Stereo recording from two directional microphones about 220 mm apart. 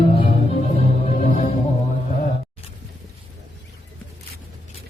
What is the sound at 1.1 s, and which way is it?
Music, 35° left (ahead or behind).